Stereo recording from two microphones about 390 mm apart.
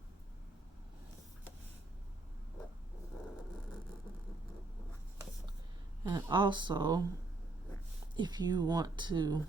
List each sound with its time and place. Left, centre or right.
6.1 s speech: centre
8.1 s speech: centre